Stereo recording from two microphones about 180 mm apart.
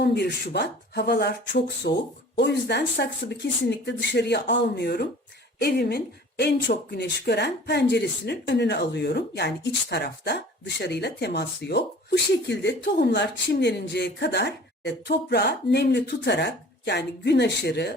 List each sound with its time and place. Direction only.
0.0 s a woman's voice: 70° left (ahead or behind)